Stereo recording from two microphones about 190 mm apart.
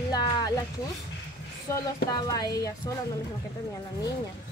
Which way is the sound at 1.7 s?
20° left (ahead or behind).